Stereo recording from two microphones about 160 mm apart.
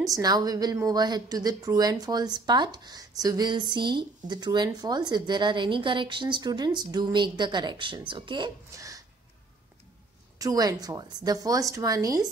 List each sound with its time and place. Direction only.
0.0 s a woman's voice: 20° right (ahead or behind)
10.4 s a woman's voice: 20° right (ahead or behind)